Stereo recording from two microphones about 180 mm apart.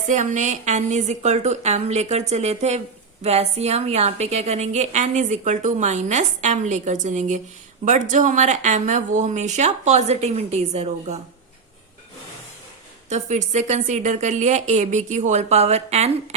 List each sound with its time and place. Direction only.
0.1 s a woman's voice: 45° right (ahead or behind)
13.1 s a woman's voice: 40° right (ahead or behind)